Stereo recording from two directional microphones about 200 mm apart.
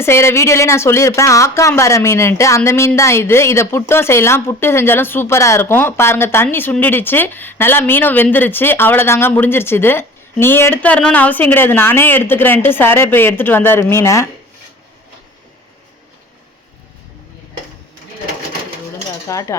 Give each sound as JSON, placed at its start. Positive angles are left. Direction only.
{"t": 0.0, "sound": "speech", "side_deg": 10}
{"t": 19.3, "sound": "speech", "side_deg": 15}